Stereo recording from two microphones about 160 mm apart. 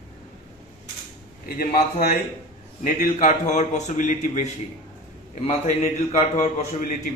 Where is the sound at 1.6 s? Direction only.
70° left (ahead or behind).